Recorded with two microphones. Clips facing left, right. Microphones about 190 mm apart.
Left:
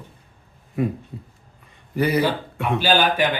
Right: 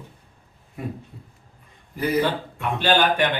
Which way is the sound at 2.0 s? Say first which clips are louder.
Left 5 dB; 75° left (ahead or behind).